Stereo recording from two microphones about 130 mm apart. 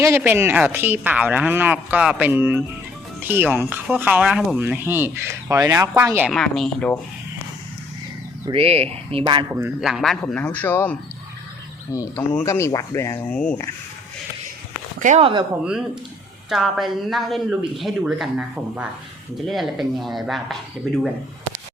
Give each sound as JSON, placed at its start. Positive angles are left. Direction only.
{"t": 0.2, "sound": "speech", "side_deg": -15}
{"t": 6.2, "sound": "speech", "side_deg": 5}
{"t": 8.4, "sound": "speech", "side_deg": -45}
{"t": 9.2, "sound": "speech", "side_deg": -35}
{"t": 9.5, "sound": "speech", "side_deg": -15}
{"t": 9.8, "sound": "a man's voice", "side_deg": 0}
{"t": 11.9, "sound": "speech", "side_deg": 25}
{"t": 13.3, "sound": "a man's voice", "side_deg": 10}
{"t": 14.9, "sound": "a sound", "side_deg": -75}
{"t": 15.2, "sound": "speech", "side_deg": -40}
{"t": 16.5, "sound": "speech", "side_deg": 0}